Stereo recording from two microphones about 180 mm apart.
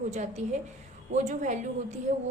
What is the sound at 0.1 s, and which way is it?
A woman's voice, 40° right (ahead or behind).